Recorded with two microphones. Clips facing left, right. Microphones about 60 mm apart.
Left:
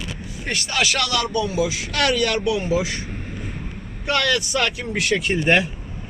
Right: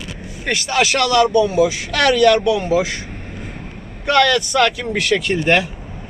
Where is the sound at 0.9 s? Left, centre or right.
Right.